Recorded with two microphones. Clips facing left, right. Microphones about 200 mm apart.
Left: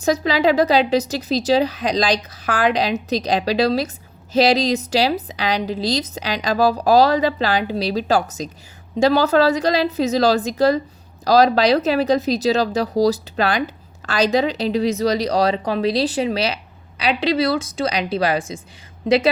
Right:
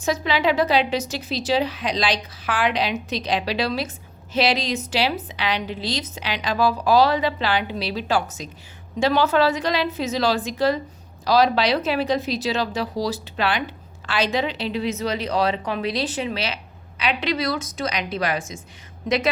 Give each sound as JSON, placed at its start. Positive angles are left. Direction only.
{"t": 0.0, "sound": "speech", "side_deg": 40}